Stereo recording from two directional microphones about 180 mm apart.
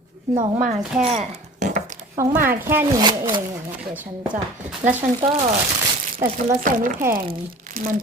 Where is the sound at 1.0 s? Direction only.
40° right (ahead or behind).